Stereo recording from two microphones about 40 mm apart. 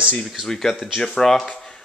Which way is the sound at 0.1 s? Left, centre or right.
Centre.